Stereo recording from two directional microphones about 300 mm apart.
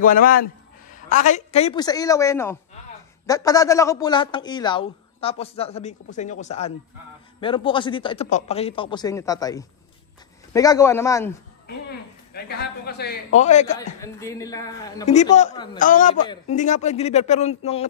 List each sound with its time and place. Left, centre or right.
0.0 s a man's voice: left; by 11.3 s centre
12.4 s a man's voice: left
13.7 s speech: centre
15.8 s a man's voice: left